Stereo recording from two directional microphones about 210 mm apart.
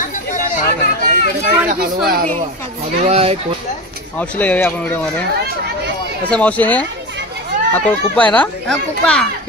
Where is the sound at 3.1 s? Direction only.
30° right (ahead or behind).